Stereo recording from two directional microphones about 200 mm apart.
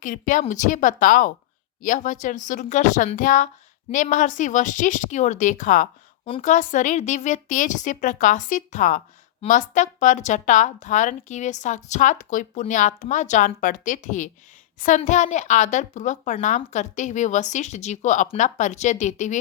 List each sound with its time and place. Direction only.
0.0 s a woman's voice: 40° left (ahead or behind)